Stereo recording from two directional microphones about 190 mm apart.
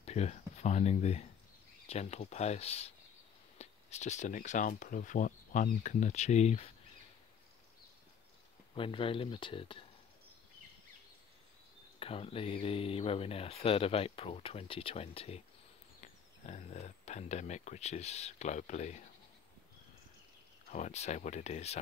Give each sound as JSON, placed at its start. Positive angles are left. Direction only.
{"t": 0.0, "sound": "speech", "side_deg": 35}
{"t": 8.7, "sound": "speech", "side_deg": 30}
{"t": 12.0, "sound": "speech", "side_deg": 30}
{"t": 20.7, "sound": "speech", "side_deg": 35}